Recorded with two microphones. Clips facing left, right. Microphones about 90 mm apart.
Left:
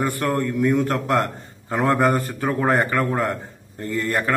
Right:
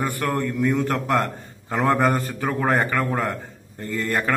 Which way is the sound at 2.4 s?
10° left (ahead or behind).